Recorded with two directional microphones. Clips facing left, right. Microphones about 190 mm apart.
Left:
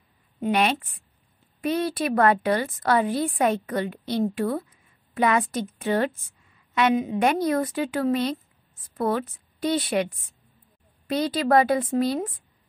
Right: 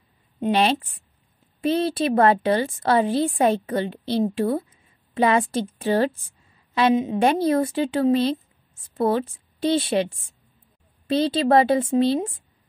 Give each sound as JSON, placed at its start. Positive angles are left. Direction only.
{"t": 0.4, "sound": "a woman's voice", "side_deg": -30}